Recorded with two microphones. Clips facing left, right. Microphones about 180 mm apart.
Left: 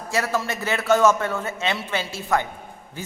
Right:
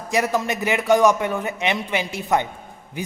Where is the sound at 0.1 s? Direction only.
15° right (ahead or behind).